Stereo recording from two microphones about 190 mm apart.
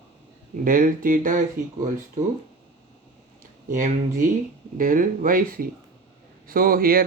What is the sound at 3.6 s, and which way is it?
Speech, 45° right (ahead or behind).